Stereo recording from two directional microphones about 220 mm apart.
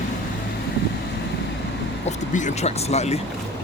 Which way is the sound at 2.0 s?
30° left (ahead or behind).